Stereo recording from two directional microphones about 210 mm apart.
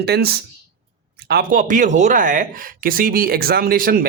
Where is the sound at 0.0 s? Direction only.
50° right (ahead or behind).